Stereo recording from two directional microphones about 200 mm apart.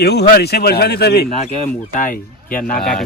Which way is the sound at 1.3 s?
35° left (ahead or behind).